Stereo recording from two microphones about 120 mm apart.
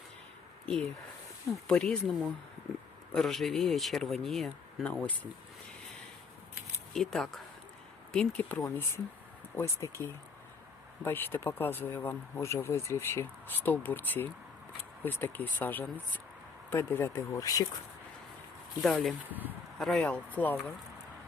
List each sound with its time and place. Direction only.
0.6 s speech: 5° left (ahead or behind)
3.2 s speech: centre (ahead or behind)
6.9 s speech: 5° left (ahead or behind); by 9.9 s 25° left (ahead or behind)
11.0 s speech: 15° left (ahead or behind)
18.8 s speech: centre (ahead or behind)
19.3 s speech: 15° right (ahead or behind)
19.8 s speech: 5° left (ahead or behind)
20.1 s speech: 15° left (ahead or behind)